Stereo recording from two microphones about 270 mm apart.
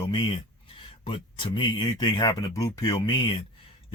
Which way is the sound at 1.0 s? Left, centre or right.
Centre.